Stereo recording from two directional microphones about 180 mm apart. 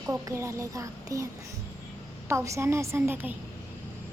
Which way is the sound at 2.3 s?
15° right (ahead or behind).